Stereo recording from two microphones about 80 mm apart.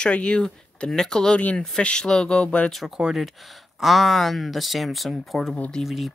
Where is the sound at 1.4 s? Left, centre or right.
Centre.